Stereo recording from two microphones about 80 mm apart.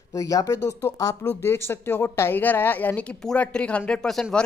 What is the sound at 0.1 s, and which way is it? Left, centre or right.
Speech, left.